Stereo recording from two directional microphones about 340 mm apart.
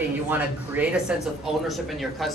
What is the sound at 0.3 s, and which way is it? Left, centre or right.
A man's voice, centre.